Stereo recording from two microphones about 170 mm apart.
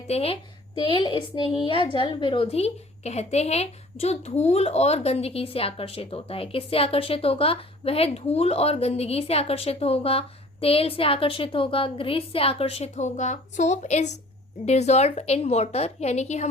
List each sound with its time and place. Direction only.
0.1 s a woman's voice: 35° left (ahead or behind)